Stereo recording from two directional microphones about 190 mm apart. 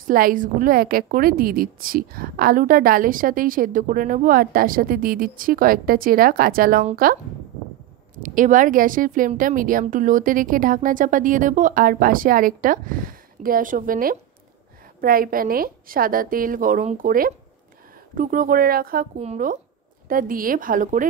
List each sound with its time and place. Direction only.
0.0 s a woman's voice: 50° right (ahead or behind)
8.2 s a woman's voice: 45° right (ahead or behind)
19.1 s a woman's voice: 35° right (ahead or behind)